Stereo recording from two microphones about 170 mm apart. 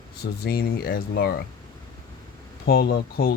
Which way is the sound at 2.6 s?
65° left (ahead or behind).